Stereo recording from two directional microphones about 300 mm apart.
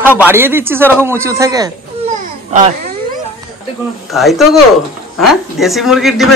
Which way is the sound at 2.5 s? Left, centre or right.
Right.